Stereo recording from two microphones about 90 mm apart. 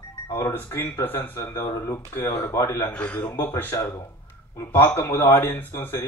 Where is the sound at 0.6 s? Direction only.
30° left (ahead or behind).